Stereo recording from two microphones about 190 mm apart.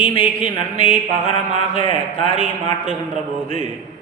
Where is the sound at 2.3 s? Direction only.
30° left (ahead or behind).